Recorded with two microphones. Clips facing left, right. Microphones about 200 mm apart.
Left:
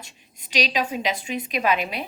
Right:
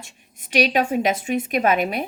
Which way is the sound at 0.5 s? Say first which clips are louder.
Right 6 dB; 60° right (ahead or behind).